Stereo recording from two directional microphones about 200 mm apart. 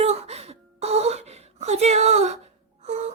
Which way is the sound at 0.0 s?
30° right (ahead or behind).